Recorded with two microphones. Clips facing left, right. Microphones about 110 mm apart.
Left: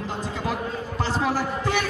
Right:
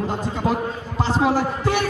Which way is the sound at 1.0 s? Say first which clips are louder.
Right 6 dB; 15° right (ahead or behind).